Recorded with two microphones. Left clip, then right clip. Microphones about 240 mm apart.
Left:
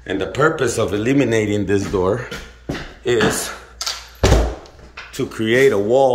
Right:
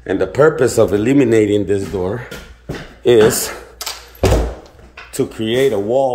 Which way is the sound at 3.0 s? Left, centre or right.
Right.